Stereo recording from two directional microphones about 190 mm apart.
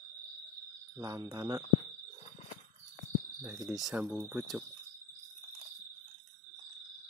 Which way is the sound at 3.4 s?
10° right (ahead or behind).